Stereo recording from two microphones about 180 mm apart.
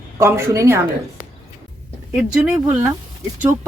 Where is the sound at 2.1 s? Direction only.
5° right (ahead or behind).